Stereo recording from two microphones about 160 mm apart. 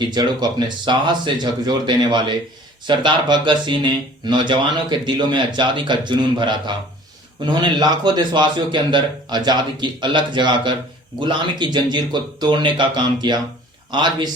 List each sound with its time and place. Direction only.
0.1 s a man's voice: 25° right (ahead or behind)